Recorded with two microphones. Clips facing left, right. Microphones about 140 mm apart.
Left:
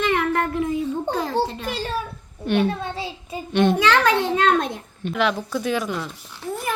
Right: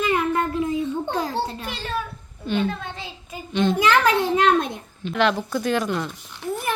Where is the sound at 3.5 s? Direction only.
60° left (ahead or behind).